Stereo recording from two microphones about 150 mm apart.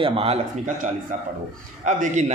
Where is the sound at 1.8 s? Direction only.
55° right (ahead or behind).